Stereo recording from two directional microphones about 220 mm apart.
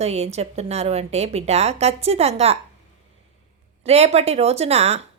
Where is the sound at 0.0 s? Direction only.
30° right (ahead or behind).